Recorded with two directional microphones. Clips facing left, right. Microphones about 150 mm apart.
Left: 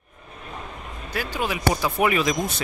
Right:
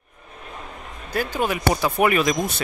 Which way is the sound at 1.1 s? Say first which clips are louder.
Right 4 dB; 50° right (ahead or behind).